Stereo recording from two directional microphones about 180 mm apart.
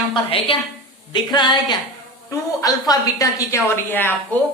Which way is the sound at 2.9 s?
20° left (ahead or behind).